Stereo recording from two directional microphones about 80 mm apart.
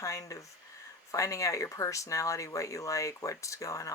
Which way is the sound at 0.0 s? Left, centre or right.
Left.